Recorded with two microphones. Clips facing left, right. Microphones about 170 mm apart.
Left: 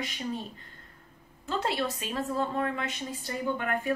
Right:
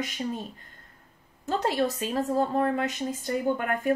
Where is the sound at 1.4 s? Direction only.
40° right (ahead or behind).